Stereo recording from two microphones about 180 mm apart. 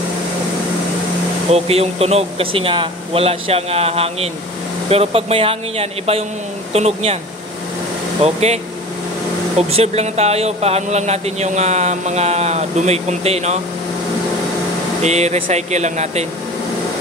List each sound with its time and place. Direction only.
1.5 s speech: 35° right (ahead or behind)
8.2 s speech: 35° right (ahead or behind)
9.6 s speech: 35° right (ahead or behind)
15.0 s speech: 40° right (ahead or behind)